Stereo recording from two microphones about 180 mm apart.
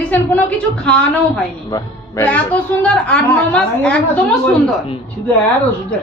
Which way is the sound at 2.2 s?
10° left (ahead or behind).